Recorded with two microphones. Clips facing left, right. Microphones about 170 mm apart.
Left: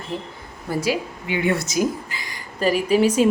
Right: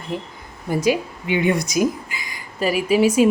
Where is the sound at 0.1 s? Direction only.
15° right (ahead or behind).